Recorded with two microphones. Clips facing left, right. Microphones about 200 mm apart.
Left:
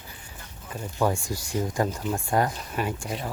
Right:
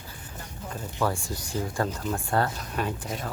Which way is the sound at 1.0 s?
15° left (ahead or behind).